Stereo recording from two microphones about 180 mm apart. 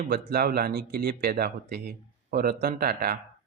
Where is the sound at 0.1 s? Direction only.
60° right (ahead or behind).